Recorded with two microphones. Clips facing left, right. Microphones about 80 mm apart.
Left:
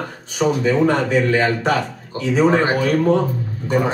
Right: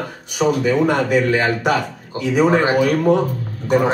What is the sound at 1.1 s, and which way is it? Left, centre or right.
Speech, centre.